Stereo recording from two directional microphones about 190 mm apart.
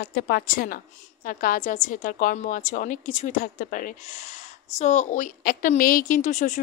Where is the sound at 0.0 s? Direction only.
55° left (ahead or behind).